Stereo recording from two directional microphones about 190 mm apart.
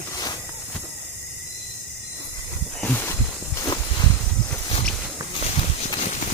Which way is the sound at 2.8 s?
10° left (ahead or behind).